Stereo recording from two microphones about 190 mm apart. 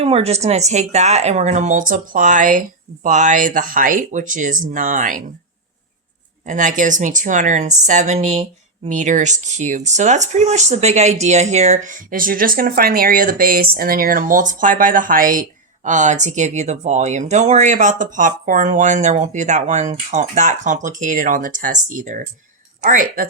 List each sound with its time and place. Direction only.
0.0 s speech: 30° right (ahead or behind)
6.4 s speech: 40° right (ahead or behind)